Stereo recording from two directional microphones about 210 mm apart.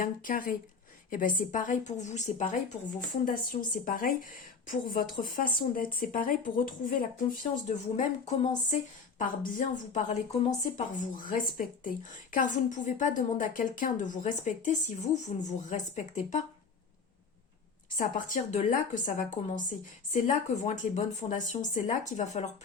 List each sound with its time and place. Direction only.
0.0 s speech: 40° left (ahead or behind)
17.8 s speech: 40° left (ahead or behind)